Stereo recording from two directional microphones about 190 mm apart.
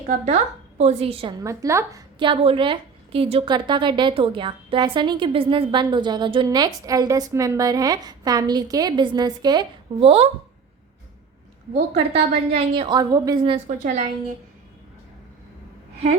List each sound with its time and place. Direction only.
0.8 s a woman's voice: 35° right (ahead or behind)
11.7 s a woman's voice: 30° right (ahead or behind)
13.7 s a woman's voice: 40° right (ahead or behind)